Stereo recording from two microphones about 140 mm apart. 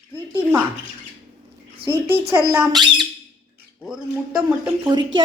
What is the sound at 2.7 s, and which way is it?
Speech, 30° right (ahead or behind).